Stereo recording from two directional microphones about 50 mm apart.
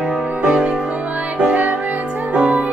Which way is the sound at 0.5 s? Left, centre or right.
Right.